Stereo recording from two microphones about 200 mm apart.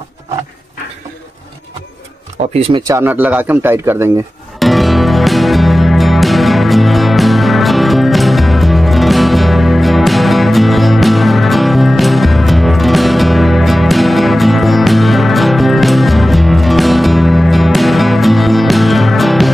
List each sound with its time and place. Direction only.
2.5 s speech: 30° right (ahead or behind)
2.8 s speech: 15° right (ahead or behind)
4.6 s music: centre (ahead or behind)